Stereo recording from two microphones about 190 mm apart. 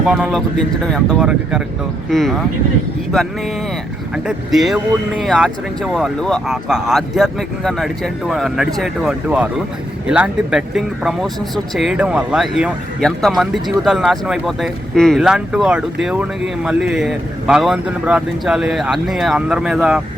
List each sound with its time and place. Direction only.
0.0 s speech: 5° right (ahead or behind)
4.1 s speech: 5° right (ahead or behind)